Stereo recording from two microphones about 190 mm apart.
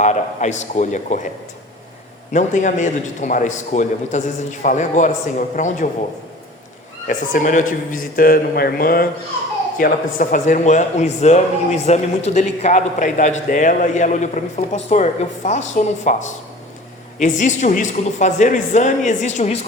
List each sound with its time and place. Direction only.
0.0 s a man's voice: 40° left (ahead or behind)
2.3 s a man's voice: 40° left (ahead or behind)
7.1 s a man's voice: 40° left (ahead or behind)
17.2 s a man's voice: 40° left (ahead or behind)